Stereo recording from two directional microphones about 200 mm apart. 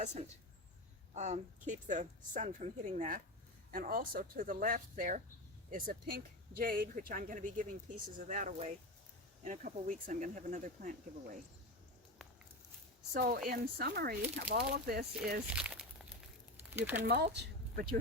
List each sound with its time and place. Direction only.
0.0 s a woman's voice: 35° right (ahead or behind)
13.1 s speech: 50° right (ahead or behind)
15.4 s speech: 5° right (ahead or behind)
17.1 s speech: 55° right (ahead or behind)